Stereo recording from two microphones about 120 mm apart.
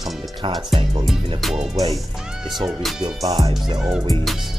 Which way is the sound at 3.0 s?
30° right (ahead or behind).